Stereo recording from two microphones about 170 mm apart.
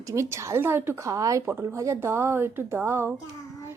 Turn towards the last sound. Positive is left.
turn(degrees=-15)  # may be behind; listen again after turning